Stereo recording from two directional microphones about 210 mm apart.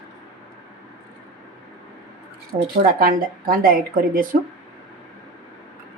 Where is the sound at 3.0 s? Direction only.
45° right (ahead or behind).